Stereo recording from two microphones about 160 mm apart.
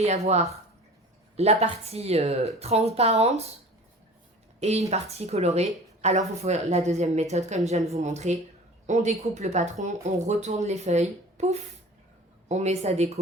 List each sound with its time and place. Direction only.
0.0 s a woman's voice: 40° right (ahead or behind)
4.6 s a woman's voice: 45° right (ahead or behind)